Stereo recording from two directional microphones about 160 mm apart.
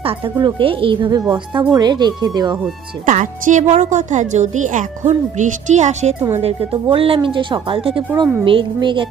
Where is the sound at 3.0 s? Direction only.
55° right (ahead or behind).